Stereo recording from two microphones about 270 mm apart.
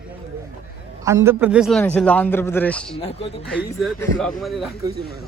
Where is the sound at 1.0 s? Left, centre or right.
Centre.